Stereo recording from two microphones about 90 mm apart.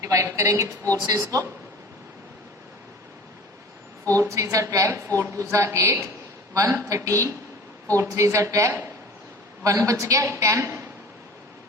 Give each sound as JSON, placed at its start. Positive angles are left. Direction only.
{"t": 0.0, "sound": "a woman's voice", "side_deg": -35}
{"t": 4.1, "sound": "a woman's voice", "side_deg": -35}